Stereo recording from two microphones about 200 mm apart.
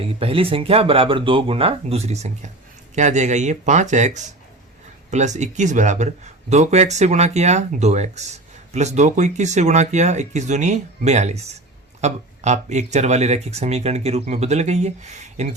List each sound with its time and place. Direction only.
0.0 s speech: 30° right (ahead or behind)